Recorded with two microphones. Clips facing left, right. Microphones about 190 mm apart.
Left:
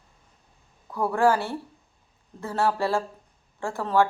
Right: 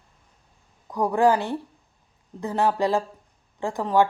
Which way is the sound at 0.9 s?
15° right (ahead or behind).